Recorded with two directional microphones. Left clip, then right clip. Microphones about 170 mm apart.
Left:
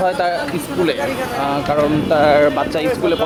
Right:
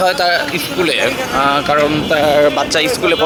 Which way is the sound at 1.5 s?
40° right (ahead or behind).